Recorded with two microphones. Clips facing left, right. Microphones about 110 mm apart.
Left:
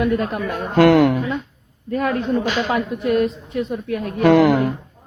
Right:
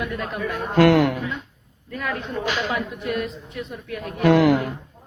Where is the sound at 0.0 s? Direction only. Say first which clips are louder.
Left 7 dB; 40° left (ahead or behind).